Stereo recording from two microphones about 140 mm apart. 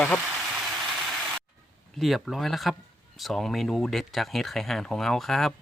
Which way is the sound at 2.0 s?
Centre (ahead or behind).